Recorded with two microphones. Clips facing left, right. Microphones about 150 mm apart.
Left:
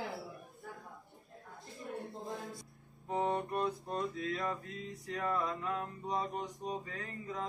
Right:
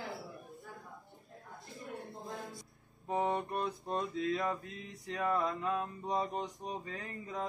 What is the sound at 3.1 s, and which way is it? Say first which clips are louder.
Speech: right 1 dB; 20° right (ahead or behind).